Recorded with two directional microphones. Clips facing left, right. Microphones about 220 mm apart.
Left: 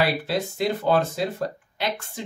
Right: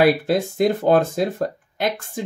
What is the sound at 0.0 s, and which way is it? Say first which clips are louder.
Speech: right 7 dB; 50° right (ahead or behind).